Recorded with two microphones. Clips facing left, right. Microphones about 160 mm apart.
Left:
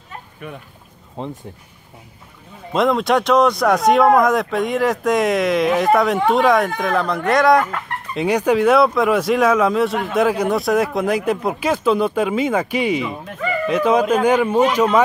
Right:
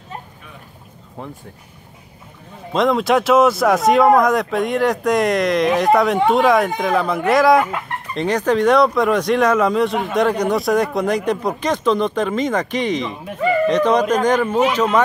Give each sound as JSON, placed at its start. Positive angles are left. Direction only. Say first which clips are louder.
{"t": 1.2, "sound": "speech", "louder": "left 4 dB", "side_deg": 20}
{"t": 2.7, "sound": "speech", "louder": "right 1 dB", "side_deg": 0}
{"t": 8.1, "sound": "speech", "louder": "left 1 dB", "side_deg": 10}